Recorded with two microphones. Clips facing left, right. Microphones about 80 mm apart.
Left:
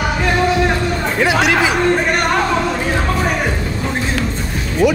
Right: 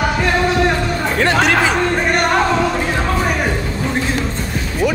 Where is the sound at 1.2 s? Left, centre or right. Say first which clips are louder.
Even; centre.